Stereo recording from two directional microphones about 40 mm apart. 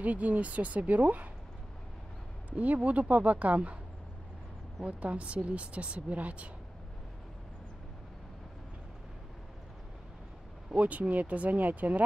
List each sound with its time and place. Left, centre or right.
0.0 s speech: right
2.5 s speech: right
4.8 s speech: right
10.8 s speech: right